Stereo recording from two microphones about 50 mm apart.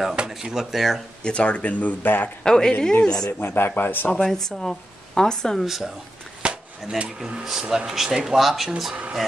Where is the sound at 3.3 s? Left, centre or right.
Left.